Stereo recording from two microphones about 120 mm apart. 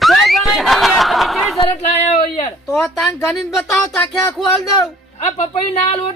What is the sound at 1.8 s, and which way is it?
Speech, 70° left (ahead or behind).